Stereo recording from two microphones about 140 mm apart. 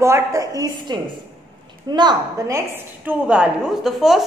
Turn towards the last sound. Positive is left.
turn(degrees=0)  # may be behind; listen again after turning